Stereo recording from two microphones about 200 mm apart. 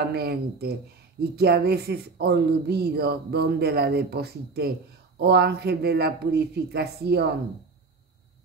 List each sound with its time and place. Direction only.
0.0 s speech: 50° right (ahead or behind)